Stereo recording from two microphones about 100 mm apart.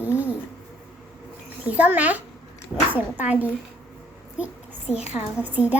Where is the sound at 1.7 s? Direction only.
15° right (ahead or behind).